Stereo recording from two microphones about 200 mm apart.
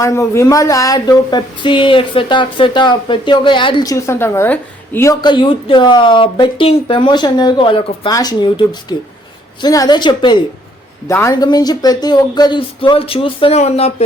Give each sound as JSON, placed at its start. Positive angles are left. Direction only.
{"t": 0.0, "sound": "speech", "side_deg": 15}
{"t": 5.2, "sound": "speech", "side_deg": 25}